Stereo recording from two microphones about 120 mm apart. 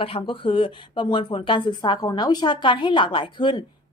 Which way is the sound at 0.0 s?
50° left (ahead or behind).